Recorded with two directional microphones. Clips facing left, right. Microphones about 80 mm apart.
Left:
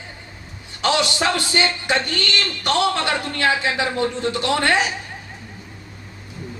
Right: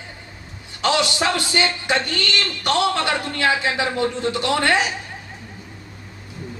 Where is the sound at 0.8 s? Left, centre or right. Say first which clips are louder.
Even; centre.